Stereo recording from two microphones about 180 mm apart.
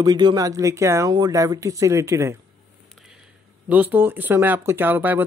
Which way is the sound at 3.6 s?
10° right (ahead or behind).